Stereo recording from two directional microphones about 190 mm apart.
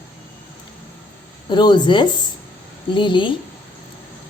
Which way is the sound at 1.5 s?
25° left (ahead or behind).